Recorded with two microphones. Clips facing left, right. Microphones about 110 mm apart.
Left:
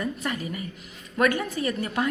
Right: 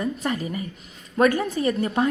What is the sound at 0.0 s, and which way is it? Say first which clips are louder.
A woman's voice: right 4 dB; 30° right (ahead or behind).